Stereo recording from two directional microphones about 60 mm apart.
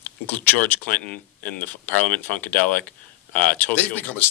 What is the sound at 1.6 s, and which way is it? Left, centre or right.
Speech, left.